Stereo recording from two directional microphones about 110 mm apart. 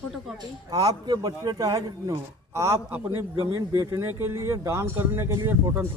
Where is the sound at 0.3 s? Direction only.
35° right (ahead or behind).